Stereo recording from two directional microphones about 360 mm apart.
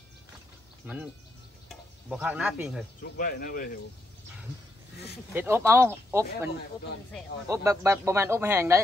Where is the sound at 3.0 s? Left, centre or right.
Left.